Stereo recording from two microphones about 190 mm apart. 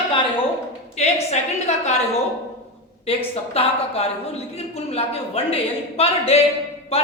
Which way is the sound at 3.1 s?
30° left (ahead or behind).